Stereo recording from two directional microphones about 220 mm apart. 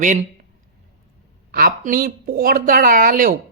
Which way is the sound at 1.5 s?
45° right (ahead or behind).